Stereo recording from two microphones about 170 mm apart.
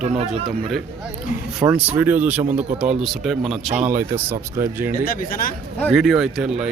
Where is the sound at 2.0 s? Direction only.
10° right (ahead or behind).